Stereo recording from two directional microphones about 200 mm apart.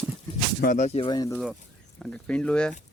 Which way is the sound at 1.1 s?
20° left (ahead or behind).